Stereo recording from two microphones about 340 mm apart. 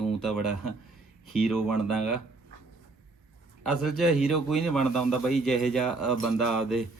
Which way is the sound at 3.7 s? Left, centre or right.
Centre.